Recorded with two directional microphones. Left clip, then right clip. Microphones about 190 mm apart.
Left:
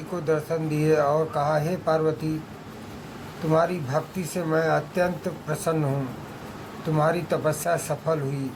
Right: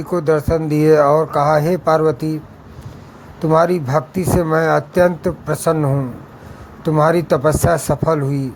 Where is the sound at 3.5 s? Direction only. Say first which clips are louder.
Right 9 dB; 60° right (ahead or behind).